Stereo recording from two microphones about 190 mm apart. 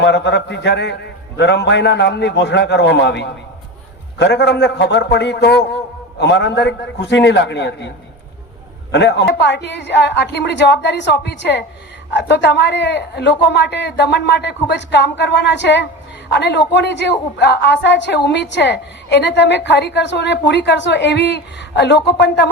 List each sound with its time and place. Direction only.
0.0 s a woman's voice: 65° left (ahead or behind)